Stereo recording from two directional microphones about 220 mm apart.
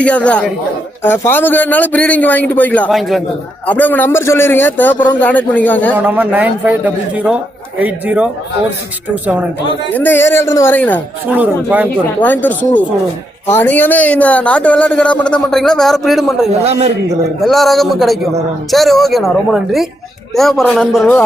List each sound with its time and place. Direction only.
0.0 s a man's voice: 5° left (ahead or behind)
6.0 s speech: 5° right (ahead or behind)
9.9 s a man's voice: 10° left (ahead or behind)
11.3 s speech: 10° right (ahead or behind)
12.2 s a man's voice: 10° left (ahead or behind)
16.5 s a man's voice: 30° right (ahead or behind)
17.4 s a man's voice: centre (ahead or behind)